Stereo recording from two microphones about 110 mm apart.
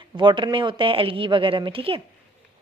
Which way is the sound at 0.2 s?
45° right (ahead or behind).